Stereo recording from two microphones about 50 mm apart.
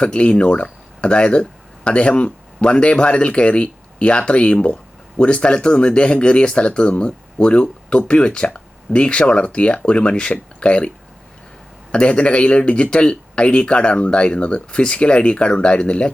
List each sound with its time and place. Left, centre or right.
0.0 s speech: left